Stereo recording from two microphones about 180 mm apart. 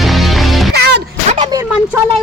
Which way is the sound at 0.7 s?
65° right (ahead or behind).